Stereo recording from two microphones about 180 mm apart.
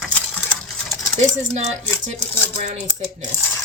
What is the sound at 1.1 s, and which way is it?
Speech, 40° right (ahead or behind).